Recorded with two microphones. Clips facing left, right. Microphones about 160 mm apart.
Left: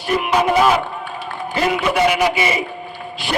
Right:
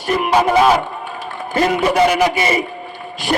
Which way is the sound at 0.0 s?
45° right (ahead or behind).